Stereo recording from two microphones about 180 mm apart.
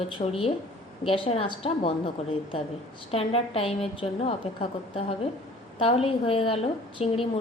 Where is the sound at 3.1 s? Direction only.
35° left (ahead or behind).